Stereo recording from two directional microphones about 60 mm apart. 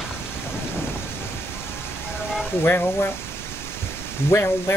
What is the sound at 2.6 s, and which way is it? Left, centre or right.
Speech, left.